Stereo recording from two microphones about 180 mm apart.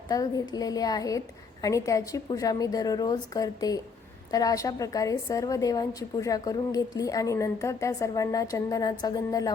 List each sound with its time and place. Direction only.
0.1 s a woman's voice: 20° left (ahead or behind)